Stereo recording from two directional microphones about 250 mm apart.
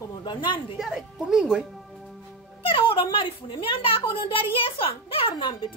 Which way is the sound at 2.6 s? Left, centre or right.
Left.